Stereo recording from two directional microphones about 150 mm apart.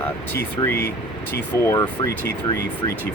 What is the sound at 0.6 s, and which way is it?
Speech, 25° left (ahead or behind).